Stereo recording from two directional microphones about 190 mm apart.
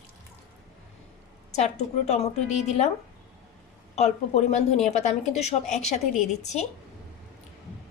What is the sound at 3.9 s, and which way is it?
A woman's voice, 35° left (ahead or behind).